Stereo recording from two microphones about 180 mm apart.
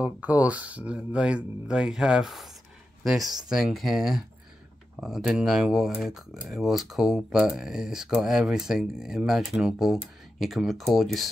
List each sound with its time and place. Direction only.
0.0 s speech: 10° right (ahead or behind)